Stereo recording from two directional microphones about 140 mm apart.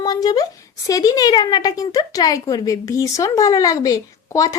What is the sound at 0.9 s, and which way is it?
Speech, 25° left (ahead or behind).